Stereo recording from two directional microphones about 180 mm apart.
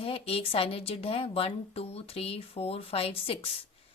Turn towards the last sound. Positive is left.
turn(degrees=30)  # may be behind; listen again after turning